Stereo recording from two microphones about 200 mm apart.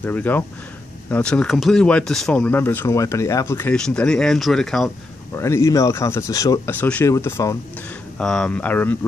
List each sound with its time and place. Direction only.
0.0 s speech: 10° left (ahead or behind)
5.4 s speech: 15° left (ahead or behind)